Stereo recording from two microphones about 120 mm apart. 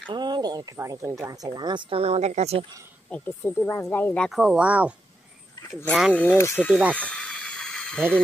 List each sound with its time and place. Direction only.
0.1 s speech: 35° right (ahead or behind); by 2.6 s 65° right (ahead or behind)
3.1 s speech: 15° left (ahead or behind)
4.2 s speech: 5° right (ahead or behind)
6.1 s speech: 20° left (ahead or behind)
6.7 s speech: 10° right (ahead or behind)
7.0 s a sound: 10° left (ahead or behind)